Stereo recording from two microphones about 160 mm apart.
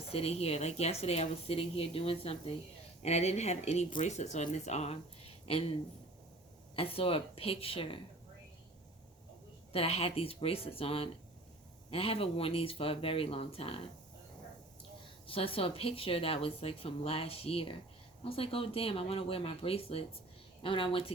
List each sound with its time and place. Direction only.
0.1 s speech: 40° left (ahead or behind)
6.7 s speech: 35° left (ahead or behind)
9.7 s speech: 40° left (ahead or behind)
15.3 s speech: 35° left (ahead or behind)